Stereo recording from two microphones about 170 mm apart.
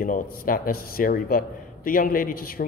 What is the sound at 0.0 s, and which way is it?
A man's voice, 55° left (ahead or behind).